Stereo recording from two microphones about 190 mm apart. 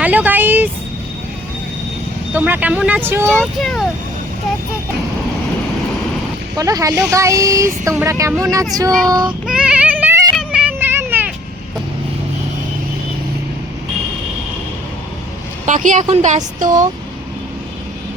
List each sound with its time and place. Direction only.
0.0 s a sound: 10° right (ahead or behind)
2.3 s speech: 10° right (ahead or behind)
3.2 s speech: 5° left (ahead or behind)
6.6 s speech: 15° right (ahead or behind)
9.0 s child singing: 20° right (ahead or behind)
9.5 s child singing: 5° right (ahead or behind)
10.3 s a sound: 5° right (ahead or behind)
15.6 s speech: 40° right (ahead or behind)